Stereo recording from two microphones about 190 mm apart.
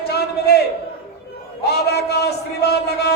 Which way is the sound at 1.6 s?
55° left (ahead or behind).